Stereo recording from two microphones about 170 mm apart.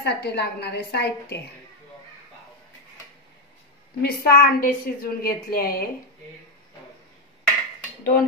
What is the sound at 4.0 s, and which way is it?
Speech, 65° left (ahead or behind).